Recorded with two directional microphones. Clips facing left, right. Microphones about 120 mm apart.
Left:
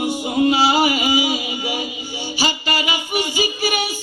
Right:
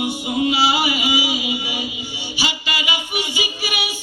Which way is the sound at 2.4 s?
40° left (ahead or behind).